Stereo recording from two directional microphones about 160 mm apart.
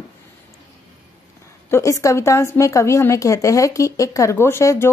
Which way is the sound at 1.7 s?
20° left (ahead or behind).